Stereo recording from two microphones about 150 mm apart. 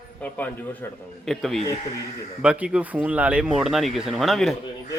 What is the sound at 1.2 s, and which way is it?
Speech, centre (ahead or behind).